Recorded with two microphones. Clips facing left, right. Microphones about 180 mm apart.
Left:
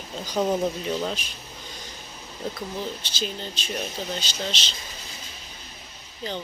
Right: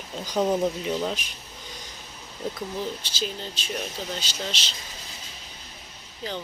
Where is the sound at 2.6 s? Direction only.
10° right (ahead or behind).